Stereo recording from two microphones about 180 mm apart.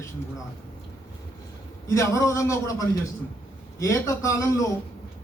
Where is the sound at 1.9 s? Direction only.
15° left (ahead or behind).